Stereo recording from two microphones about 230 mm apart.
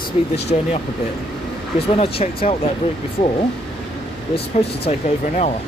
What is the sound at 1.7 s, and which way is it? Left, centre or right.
Speech, left.